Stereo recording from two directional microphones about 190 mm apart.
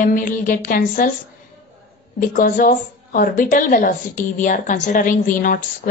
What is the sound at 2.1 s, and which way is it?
A woman's voice, 45° left (ahead or behind).